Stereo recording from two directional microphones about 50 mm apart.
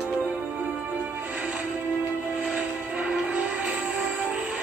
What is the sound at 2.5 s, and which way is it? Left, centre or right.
Train, right.